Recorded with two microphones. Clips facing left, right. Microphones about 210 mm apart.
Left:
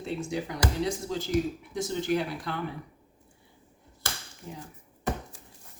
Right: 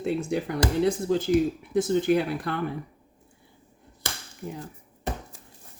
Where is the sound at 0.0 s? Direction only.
55° right (ahead or behind).